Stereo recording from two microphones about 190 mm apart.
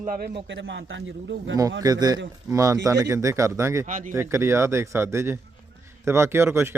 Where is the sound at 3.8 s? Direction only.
40° right (ahead or behind).